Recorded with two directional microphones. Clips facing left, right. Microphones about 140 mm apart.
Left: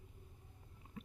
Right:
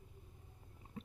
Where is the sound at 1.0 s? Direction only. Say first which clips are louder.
Right 2 dB; 30° right (ahead or behind).